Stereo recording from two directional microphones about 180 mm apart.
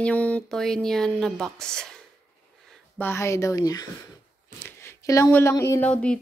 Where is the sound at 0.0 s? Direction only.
10° left (ahead or behind).